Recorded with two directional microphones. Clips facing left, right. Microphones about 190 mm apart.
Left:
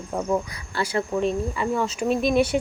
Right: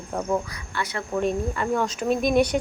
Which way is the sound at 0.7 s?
30° left (ahead or behind).